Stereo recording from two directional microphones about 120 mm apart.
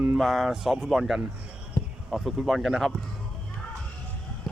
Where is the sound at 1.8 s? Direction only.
25° left (ahead or behind).